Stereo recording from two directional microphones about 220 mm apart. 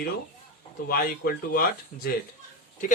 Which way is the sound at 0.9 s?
40° left (ahead or behind).